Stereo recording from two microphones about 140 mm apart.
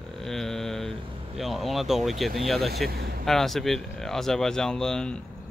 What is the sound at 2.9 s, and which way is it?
Speech, 90° right.